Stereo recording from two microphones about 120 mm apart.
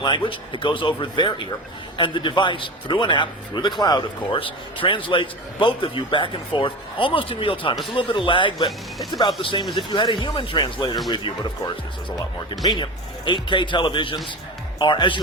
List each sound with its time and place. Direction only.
0.0 s a man's voice: 40° left (ahead or behind)